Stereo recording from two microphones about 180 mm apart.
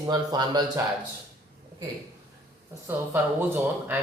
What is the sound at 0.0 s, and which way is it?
Speech, 20° right (ahead or behind).